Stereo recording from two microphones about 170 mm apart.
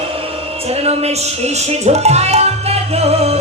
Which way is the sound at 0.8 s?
40° right (ahead or behind).